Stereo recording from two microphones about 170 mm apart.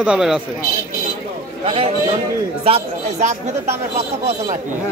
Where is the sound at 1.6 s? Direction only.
35° right (ahead or behind).